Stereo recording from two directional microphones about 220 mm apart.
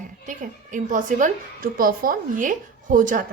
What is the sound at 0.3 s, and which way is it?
A woman's voice, 35° right (ahead or behind).